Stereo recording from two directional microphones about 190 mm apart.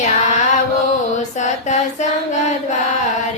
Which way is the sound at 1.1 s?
40° left (ahead or behind).